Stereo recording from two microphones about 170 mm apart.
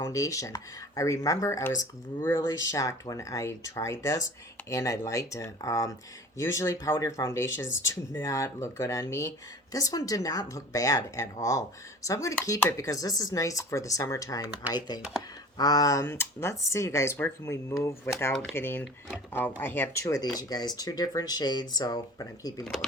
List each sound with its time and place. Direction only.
0.0 s speech: 20° left (ahead or behind)
15.5 s speech: 20° left (ahead or behind)
22.6 s speech: 5° left (ahead or behind)